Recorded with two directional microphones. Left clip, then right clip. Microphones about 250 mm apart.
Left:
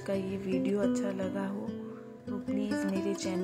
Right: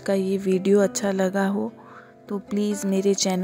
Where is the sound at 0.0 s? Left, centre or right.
Right.